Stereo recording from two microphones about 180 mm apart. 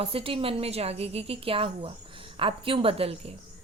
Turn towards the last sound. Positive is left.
turn(degrees=-30)  # may be behind; listen again after turning